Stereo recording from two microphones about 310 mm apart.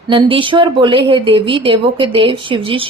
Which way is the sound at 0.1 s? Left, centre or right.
Centre.